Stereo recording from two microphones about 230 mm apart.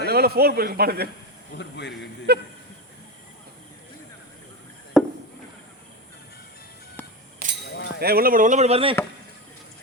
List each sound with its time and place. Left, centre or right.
0.0 s a man's voice: right
1.5 s speech: left
2.3 s a man's voice: right
4.9 s chop: centre
7.4 s livestock: right
7.9 s speech: right